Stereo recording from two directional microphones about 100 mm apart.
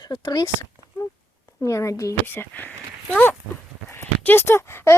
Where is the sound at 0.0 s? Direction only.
45° left (ahead or behind).